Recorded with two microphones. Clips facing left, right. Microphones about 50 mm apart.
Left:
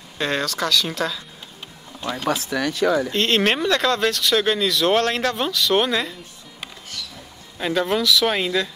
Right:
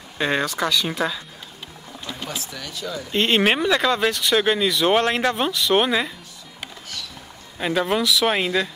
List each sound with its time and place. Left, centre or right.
0.2 s speech: centre
2.5 s speech: left
3.1 s speech: centre
7.5 s speech: centre